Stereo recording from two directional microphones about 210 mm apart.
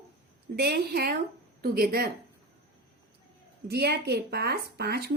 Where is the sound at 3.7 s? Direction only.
50° right (ahead or behind).